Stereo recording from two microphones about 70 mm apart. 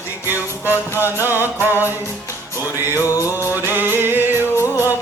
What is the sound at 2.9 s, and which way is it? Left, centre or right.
Music, left.